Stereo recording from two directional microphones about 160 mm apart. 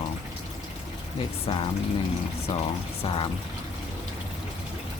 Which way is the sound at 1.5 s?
35° left (ahead or behind).